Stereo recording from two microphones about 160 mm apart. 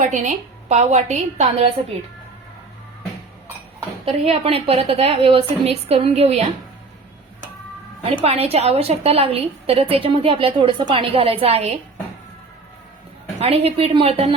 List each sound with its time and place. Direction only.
0.0 s a woman's voice: 45° right (ahead or behind)
4.0 s a woman's voice: 40° right (ahead or behind)
8.0 s a woman's voice: 40° right (ahead or behind)
13.4 s a woman's voice: 40° right (ahead or behind)